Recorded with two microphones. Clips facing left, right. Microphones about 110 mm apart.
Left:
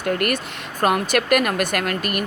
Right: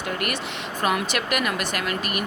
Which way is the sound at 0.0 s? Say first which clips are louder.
Left 6 dB; 50° left (ahead or behind).